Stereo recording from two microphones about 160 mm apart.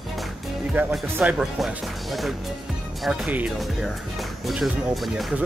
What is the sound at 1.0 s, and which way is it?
Speech, 5° right (ahead or behind).